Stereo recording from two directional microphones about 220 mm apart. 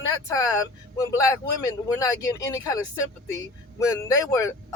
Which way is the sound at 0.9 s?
15° left (ahead or behind).